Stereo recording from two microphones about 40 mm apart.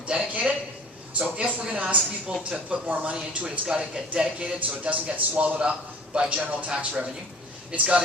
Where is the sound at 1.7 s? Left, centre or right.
Right.